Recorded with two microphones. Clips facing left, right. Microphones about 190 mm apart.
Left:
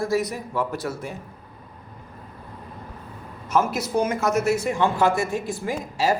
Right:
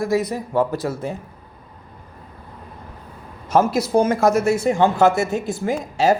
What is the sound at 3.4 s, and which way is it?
Speech, 30° right (ahead or behind).